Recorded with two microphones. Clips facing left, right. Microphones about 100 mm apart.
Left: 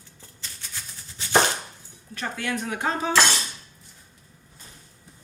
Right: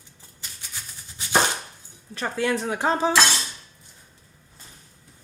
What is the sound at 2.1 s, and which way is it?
Dishes, 35° right (ahead or behind).